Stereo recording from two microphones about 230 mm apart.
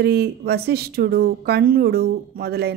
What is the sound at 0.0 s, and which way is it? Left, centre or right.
A woman's voice, right.